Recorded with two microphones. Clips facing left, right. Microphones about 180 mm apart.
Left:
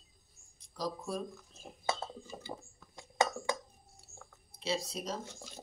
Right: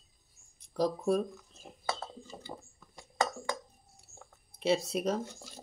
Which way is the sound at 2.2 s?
10° left (ahead or behind).